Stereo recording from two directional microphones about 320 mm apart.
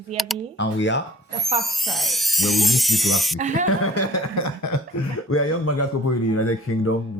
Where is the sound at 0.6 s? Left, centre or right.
Left.